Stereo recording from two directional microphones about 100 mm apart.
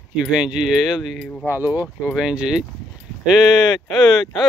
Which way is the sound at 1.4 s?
20° right (ahead or behind).